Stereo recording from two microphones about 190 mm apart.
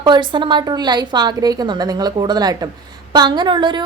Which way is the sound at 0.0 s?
25° right (ahead or behind).